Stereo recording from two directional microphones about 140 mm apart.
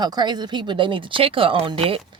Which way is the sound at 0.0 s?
30° right (ahead or behind).